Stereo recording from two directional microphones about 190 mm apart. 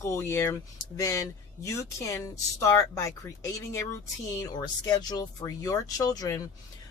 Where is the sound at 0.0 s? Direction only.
15° left (ahead or behind).